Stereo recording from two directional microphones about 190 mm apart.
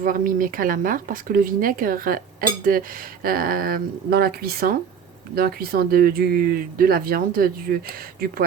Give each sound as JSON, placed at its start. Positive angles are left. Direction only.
{"t": 0.0, "sound": "speech", "side_deg": -45}